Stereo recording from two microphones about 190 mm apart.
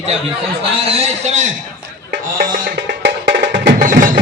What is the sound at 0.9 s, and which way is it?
Speech, 35° right (ahead or behind).